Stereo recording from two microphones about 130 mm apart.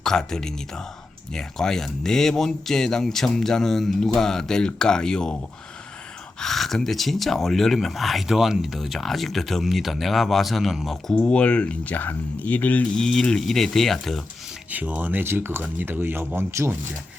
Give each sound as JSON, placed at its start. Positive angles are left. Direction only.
{"t": 0.0, "sound": "speech", "side_deg": 5}
{"t": 6.4, "sound": "speech", "side_deg": 0}
{"t": 14.7, "sound": "speech", "side_deg": -15}